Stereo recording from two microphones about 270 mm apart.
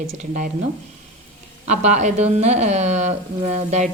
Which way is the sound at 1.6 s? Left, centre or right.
Right.